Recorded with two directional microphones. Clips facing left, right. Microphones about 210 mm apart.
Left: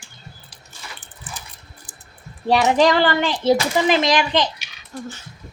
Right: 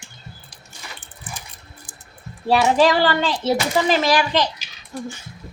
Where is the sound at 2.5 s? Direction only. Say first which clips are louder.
Even; 20° left (ahead or behind).